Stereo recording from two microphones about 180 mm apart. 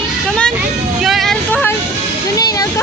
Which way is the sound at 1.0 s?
Centre (ahead or behind).